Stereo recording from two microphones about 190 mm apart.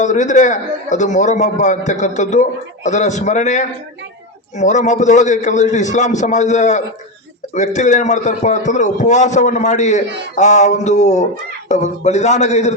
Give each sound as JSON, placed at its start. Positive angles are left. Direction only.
{"t": 0.0, "sound": "a man's voice", "side_deg": 40}